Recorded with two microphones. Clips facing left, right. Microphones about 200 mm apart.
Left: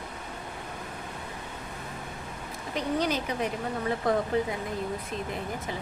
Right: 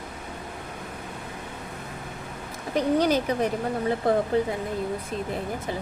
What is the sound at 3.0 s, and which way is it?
A woman's voice, 40° right (ahead or behind).